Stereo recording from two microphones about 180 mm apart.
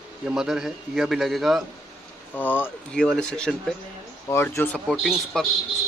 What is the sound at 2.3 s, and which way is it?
Speech, 10° left (ahead or behind).